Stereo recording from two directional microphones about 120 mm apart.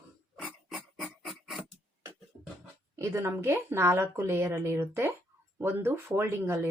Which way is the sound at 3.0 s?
25° right (ahead or behind).